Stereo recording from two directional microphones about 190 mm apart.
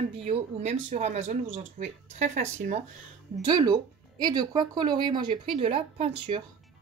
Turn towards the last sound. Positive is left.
turn(degrees=-30)  # may be behind; listen again after turning